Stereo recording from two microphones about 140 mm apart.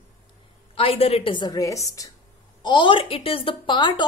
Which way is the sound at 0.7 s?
45° left (ahead or behind).